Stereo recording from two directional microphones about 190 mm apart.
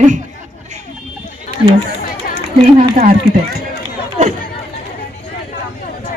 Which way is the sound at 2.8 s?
45° right (ahead or behind).